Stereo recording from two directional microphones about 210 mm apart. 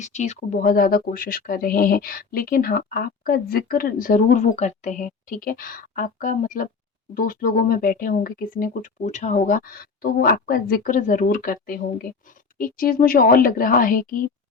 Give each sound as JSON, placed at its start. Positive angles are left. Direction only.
{"t": 0.0, "sound": "speech", "side_deg": 35}